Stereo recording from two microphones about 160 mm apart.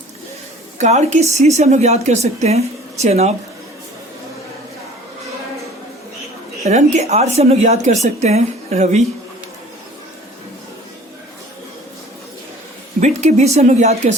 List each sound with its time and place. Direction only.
0.8 s speech: 45° right (ahead or behind)
6.7 s speech: 45° right (ahead or behind)
13.0 s speech: 45° right (ahead or behind)